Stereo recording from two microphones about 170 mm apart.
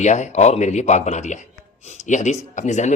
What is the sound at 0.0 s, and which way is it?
A man's voice, 45° left (ahead or behind).